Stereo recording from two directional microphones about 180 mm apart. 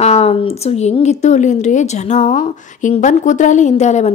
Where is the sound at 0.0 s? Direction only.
35° left (ahead or behind).